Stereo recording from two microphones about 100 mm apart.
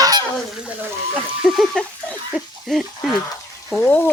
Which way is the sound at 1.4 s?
Centre (ahead or behind).